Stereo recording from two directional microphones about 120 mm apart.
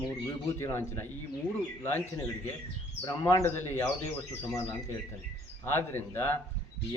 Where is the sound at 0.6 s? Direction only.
20° left (ahead or behind).